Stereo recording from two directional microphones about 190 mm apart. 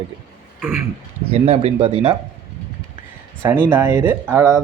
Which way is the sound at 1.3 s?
35° right (ahead or behind).